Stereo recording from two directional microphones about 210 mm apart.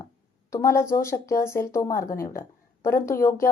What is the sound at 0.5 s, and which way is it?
Speech, 15° left (ahead or behind).